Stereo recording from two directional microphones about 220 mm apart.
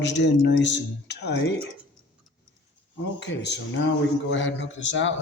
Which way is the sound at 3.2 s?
50° left (ahead or behind).